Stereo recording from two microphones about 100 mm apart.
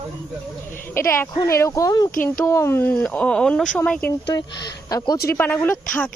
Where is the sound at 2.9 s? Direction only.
15° left (ahead or behind).